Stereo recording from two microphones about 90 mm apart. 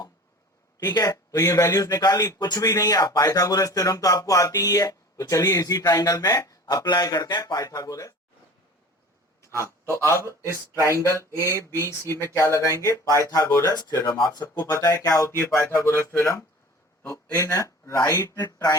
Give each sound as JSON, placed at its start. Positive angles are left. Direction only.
{"t": 0.9, "sound": "speech", "side_deg": 40}
{"t": 9.5, "sound": "speech", "side_deg": -30}
{"t": 9.8, "sound": "speech", "side_deg": 30}
{"t": 11.3, "sound": "speech", "side_deg": 30}
{"t": 13.8, "sound": "speech", "side_deg": 50}